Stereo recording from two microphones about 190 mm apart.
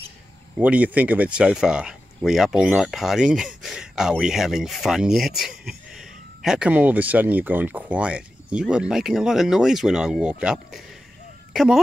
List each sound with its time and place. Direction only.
0.6 s speech: 10° right (ahead or behind)